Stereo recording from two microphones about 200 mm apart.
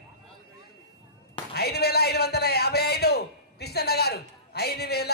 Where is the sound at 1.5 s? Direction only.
55° left (ahead or behind).